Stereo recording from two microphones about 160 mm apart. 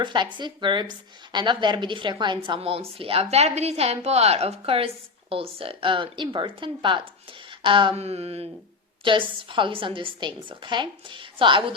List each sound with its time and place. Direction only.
0.0 s a woman's voice: 30° right (ahead or behind)